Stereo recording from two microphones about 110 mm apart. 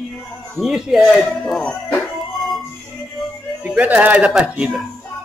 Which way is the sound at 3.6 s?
10° right (ahead or behind).